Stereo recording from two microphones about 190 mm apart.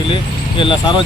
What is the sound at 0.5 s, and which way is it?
Speech, 25° left (ahead or behind).